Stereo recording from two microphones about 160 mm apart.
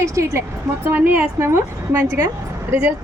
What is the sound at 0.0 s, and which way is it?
A woman's voice, 20° right (ahead or behind).